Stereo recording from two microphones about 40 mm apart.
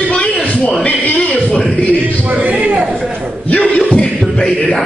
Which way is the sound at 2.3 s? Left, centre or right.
Right.